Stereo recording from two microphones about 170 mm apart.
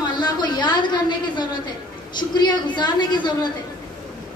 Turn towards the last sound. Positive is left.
turn(degrees=25)  # may be behind; listen again after turning